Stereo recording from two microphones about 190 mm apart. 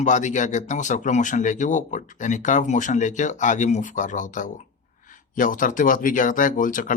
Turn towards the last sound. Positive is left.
turn(degrees=45)  # may be behind; listen again after turning